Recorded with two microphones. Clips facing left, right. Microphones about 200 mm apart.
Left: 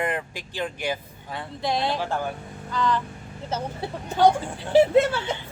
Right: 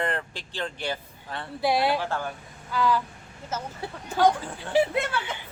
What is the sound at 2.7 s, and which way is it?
Speech, 10° right (ahead or behind).